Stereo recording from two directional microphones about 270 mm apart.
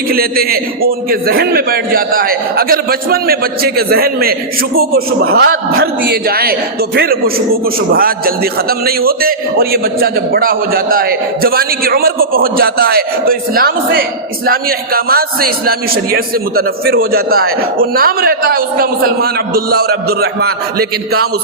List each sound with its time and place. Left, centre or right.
0.1 s a man's voice: right